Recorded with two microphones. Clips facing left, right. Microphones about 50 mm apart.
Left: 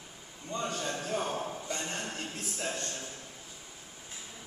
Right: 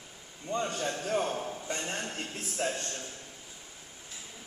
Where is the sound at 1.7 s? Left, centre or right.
Right.